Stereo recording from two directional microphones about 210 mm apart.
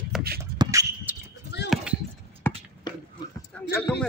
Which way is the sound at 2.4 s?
10° left (ahead or behind).